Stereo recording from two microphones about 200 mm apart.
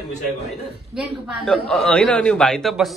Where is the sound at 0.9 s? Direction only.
Centre (ahead or behind).